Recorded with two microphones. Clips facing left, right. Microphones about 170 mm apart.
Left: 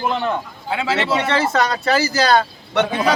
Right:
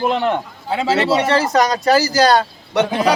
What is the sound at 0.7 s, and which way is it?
Speech, 35° right (ahead or behind).